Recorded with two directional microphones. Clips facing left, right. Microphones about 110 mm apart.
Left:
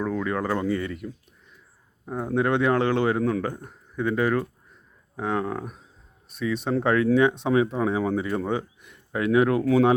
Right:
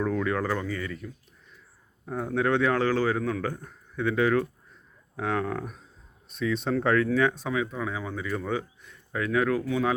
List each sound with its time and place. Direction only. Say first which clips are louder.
0.0 s speech: even; 10° left (ahead or behind); by 1.1 s 30° left (ahead or behind)
2.0 s a man's voice: left 2 dB; 10° left (ahead or behind); by 8.4 s 25° left (ahead or behind)
8.4 s speech: left 3 dB; 15° left (ahead or behind)